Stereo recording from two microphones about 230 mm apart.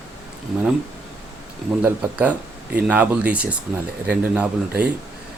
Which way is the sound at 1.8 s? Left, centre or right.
Centre.